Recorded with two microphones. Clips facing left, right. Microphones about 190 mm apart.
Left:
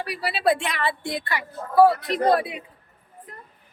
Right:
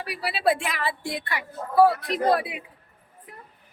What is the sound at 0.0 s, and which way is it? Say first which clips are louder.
A woman's voice: left 1 dB; centre (ahead or behind).